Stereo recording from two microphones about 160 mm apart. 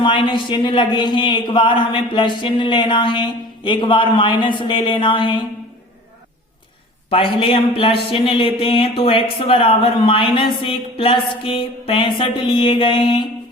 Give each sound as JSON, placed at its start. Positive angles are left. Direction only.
{"t": 0.0, "sound": "speech", "side_deg": 30}
{"t": 7.1, "sound": "speech", "side_deg": 35}